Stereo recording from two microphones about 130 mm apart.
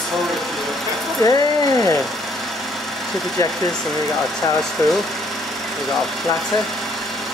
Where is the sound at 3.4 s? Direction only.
25° left (ahead or behind).